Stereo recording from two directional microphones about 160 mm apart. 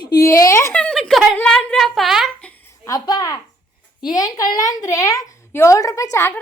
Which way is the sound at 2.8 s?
25° left (ahead or behind).